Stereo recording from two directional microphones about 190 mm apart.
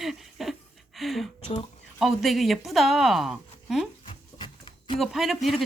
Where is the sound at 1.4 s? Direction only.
30° left (ahead or behind).